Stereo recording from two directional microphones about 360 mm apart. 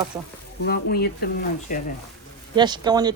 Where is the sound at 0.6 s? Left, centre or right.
Left.